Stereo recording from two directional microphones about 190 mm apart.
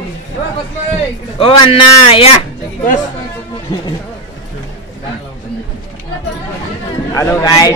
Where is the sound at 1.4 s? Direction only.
30° left (ahead or behind).